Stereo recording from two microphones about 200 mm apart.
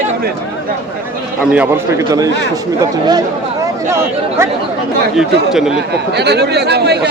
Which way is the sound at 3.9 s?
15° right (ahead or behind).